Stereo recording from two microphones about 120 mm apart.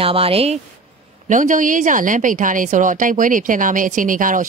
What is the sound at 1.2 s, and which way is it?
A woman's voice, 90° right.